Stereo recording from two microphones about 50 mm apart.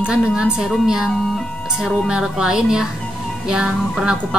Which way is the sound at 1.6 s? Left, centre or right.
Centre.